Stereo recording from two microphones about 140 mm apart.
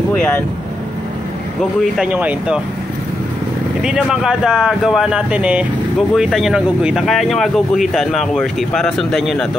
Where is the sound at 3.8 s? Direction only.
5° right (ahead or behind).